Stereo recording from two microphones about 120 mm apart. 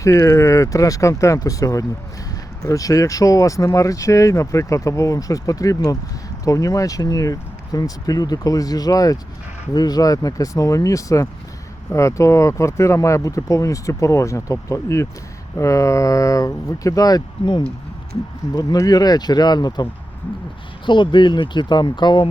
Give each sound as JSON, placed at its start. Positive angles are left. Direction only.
{"t": 0.0, "sound": "speech", "side_deg": 25}